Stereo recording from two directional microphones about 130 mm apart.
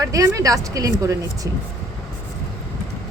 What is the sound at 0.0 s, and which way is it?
Speech, 25° right (ahead or behind).